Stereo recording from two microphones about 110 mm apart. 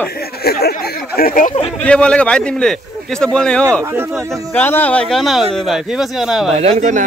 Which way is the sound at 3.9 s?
20° right (ahead or behind).